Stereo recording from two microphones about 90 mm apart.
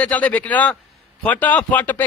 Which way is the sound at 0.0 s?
15° left (ahead or behind).